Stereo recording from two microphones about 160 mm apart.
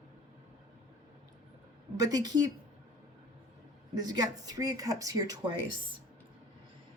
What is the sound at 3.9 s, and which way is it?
Speech, 25° right (ahead or behind).